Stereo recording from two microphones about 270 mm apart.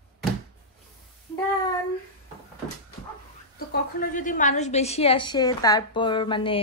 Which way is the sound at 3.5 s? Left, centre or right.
Left.